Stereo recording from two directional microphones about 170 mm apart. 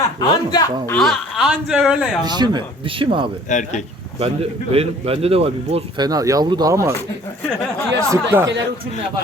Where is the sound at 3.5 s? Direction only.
45° left (ahead or behind).